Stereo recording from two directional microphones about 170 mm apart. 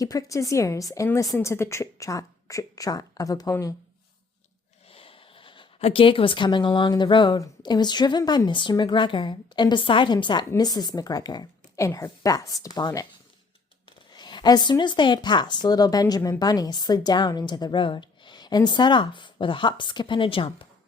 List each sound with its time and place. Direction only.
0.0 s a woman's voice: 20° left (ahead or behind)
4.9 s a woman's voice: 35° left (ahead or behind)
14.1 s a woman's voice: 25° left (ahead or behind)